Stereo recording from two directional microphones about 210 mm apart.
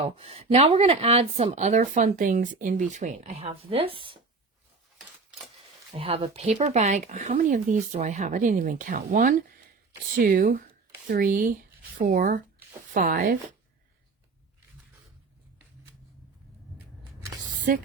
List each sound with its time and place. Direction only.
0.0 s speech: 30° right (ahead or behind)
5.9 s speech: 25° right (ahead or behind)